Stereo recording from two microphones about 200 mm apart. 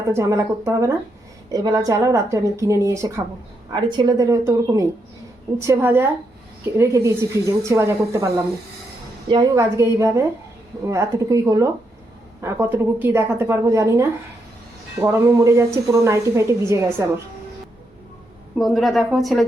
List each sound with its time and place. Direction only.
0.1 s a woman's voice: 15° right (ahead or behind)
18.5 s a woman's voice: centre (ahead or behind)